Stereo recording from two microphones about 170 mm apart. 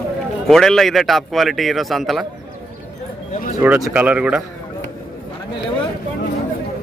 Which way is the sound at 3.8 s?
10° right (ahead or behind).